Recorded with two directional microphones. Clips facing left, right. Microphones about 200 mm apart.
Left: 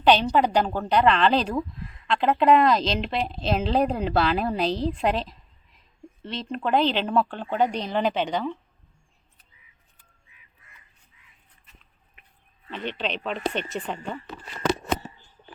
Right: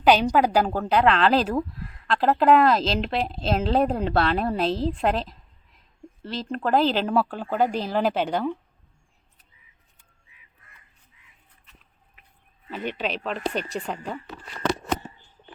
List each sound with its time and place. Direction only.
0.0 s speech: 10° right (ahead or behind)
12.7 s speech: 10° right (ahead or behind)